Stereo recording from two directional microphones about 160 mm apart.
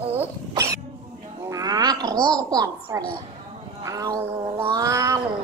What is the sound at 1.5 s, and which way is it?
Cat, 25° right (ahead or behind).